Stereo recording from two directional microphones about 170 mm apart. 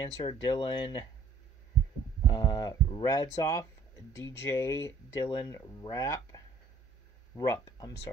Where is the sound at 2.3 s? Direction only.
25° left (ahead or behind).